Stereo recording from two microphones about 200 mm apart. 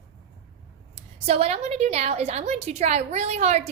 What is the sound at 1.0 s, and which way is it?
A woman's voice, 30° right (ahead or behind).